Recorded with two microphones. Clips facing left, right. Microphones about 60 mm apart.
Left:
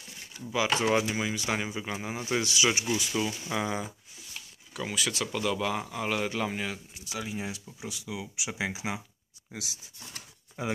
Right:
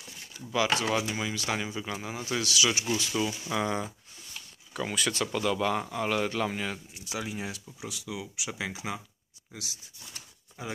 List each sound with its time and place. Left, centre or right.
0.5 s speech: centre
0.7 s speech: left
3.1 s speech: centre
10.1 s a sound: left